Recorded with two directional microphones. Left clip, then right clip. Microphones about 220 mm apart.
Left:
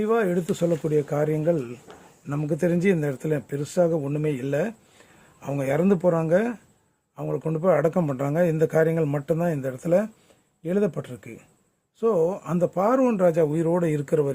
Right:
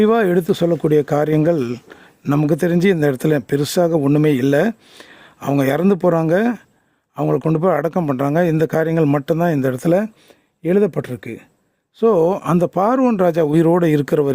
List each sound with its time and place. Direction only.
0.0 s a man's voice: 50° right (ahead or behind)